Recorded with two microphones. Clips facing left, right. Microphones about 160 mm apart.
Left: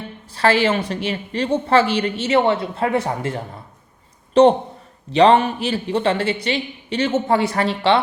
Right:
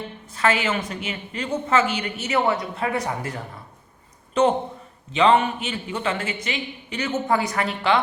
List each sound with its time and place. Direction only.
0.3 s a woman's voice: 35° left (ahead or behind)
5.1 s a woman's voice: 35° left (ahead or behind)